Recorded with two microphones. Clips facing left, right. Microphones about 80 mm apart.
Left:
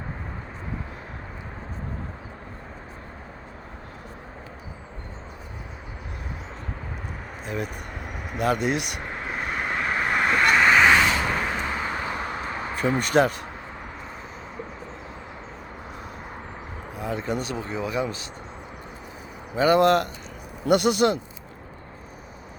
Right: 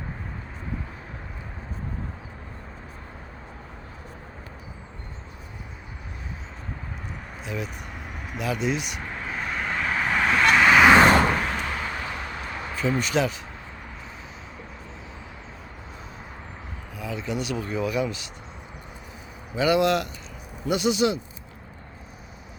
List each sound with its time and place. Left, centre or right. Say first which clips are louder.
7.4 s speech: left 2 dB; left
9.2 s vehicle: left 1 dB; centre
11.0 s a sound: right 6 dB; right
11.3 s vehicle: right 1 dB; centre
11.6 s vehicle: left 2 dB; centre
12.2 s artillery fire: left 4 dB; left
13.0 s speech: left 7 dB; left
16.9 s speech: left 3 dB; left
19.5 s speech: left 3 dB; left